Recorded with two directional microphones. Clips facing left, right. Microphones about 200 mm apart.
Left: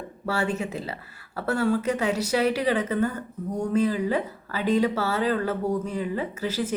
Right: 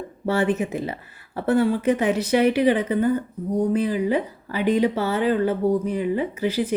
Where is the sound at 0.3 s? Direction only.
20° right (ahead or behind).